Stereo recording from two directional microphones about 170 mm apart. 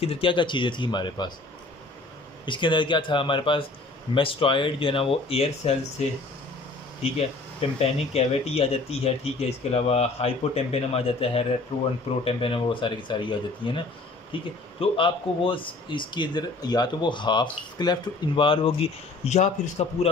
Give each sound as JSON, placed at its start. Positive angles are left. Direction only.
{"t": 0.0, "sound": "speech", "side_deg": 35}
{"t": 2.4, "sound": "speech", "side_deg": 30}
{"t": 7.8, "sound": "speech", "side_deg": 35}